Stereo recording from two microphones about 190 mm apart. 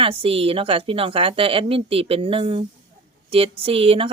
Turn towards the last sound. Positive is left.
turn(degrees=-30)  # may be behind; listen again after turning